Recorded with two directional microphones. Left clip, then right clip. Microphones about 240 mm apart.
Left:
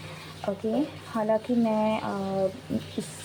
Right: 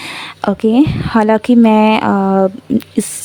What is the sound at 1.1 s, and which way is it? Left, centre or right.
Speech, right.